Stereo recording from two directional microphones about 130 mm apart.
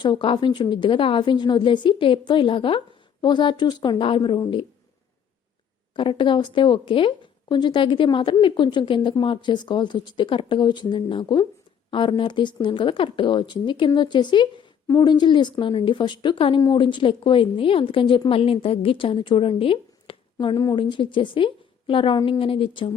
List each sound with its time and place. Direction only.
0.0 s a woman's voice: 40° left (ahead or behind)
6.0 s a woman's voice: 40° left (ahead or behind)